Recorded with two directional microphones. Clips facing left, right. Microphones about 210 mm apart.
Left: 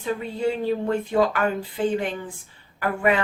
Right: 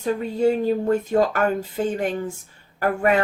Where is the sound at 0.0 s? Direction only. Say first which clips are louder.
Right 5 dB; 40° right (ahead or behind).